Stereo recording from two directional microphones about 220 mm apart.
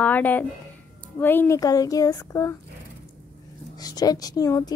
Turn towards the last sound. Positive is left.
turn(degrees=15)  # may be behind; listen again after turning